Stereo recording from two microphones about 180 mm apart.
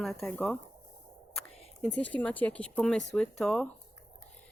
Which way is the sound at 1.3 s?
5° left (ahead or behind).